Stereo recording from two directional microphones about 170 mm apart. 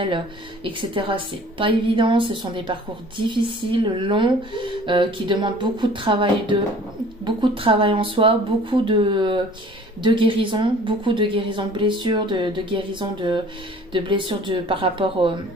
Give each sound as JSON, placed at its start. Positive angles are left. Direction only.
{"t": 0.7, "sound": "a woman's voice", "side_deg": -30}